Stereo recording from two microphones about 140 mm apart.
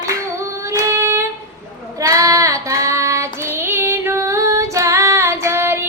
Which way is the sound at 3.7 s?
20° right (ahead or behind).